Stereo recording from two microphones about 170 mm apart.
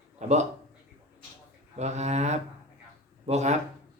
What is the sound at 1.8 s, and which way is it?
Speech, 40° right (ahead or behind).